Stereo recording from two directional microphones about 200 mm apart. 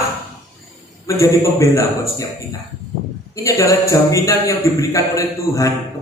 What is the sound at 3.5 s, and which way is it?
A man's voice, 15° left (ahead or behind).